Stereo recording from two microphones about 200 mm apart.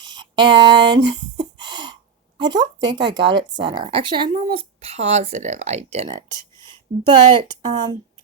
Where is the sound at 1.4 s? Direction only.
20° right (ahead or behind).